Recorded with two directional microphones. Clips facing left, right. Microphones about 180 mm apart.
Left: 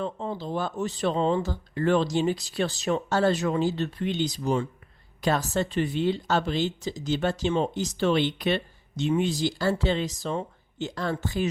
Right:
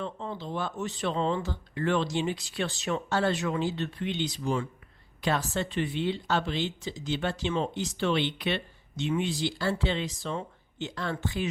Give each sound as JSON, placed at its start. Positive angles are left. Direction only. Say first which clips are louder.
{"t": 0.0, "sound": "speech", "louder": "left 4 dB", "side_deg": 40}